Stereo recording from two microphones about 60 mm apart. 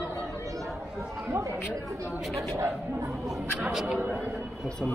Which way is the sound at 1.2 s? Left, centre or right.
Right.